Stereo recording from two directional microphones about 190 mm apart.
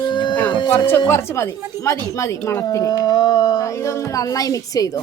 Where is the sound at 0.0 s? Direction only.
25° left (ahead or behind).